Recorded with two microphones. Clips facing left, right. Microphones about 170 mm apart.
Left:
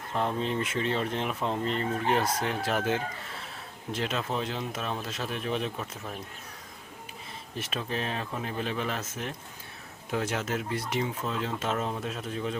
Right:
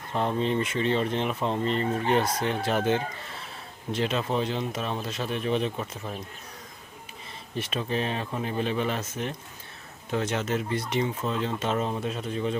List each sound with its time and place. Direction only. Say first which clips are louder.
0.1 s speech: right 3 dB; centre (ahead or behind)
7.5 s speech: right 4 dB; centre (ahead or behind)